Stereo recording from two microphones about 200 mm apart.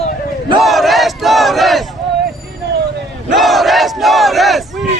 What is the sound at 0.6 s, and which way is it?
Battle cry, centre (ahead or behind).